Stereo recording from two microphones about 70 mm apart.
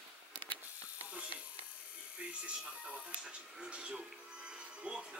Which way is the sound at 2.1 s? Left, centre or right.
Centre.